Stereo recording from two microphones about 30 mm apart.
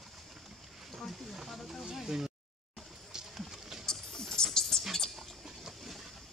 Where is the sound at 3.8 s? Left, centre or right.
Centre.